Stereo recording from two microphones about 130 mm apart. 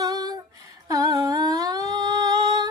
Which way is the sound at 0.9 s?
25° right (ahead or behind).